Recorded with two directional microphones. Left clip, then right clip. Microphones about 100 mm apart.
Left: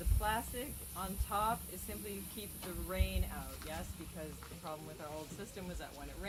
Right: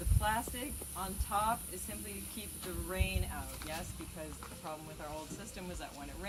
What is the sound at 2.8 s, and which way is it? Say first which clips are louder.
Speech: right 3 dB; 5° left (ahead or behind).